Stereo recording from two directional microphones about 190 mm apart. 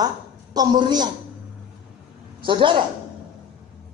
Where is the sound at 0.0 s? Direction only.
20° right (ahead or behind).